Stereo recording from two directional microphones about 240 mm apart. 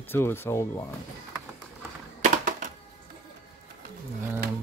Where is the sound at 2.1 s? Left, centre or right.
Right.